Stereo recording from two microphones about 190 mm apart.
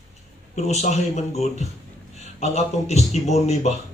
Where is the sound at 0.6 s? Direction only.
35° left (ahead or behind).